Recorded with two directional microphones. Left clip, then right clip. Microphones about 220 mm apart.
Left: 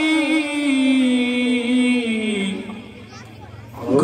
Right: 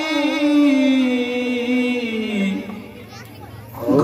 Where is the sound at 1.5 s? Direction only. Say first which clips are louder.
Left 1 dB; 10° right (ahead or behind).